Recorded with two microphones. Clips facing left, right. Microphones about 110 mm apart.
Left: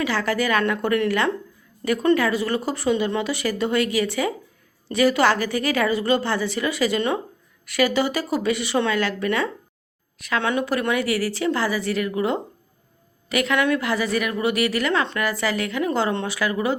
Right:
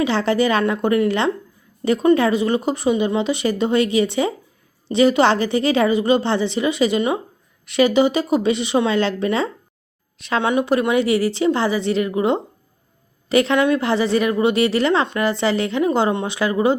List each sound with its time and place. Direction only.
0.0 s a woman's voice: 25° right (ahead or behind)